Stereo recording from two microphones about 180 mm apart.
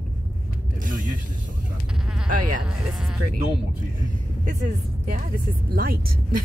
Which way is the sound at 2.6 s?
Centre (ahead or behind).